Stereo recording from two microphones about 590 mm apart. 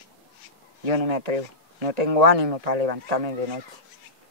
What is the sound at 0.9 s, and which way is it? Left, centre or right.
Speech, right.